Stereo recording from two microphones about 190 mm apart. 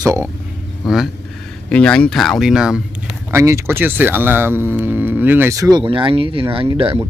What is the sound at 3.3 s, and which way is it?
Speech, 15° right (ahead or behind).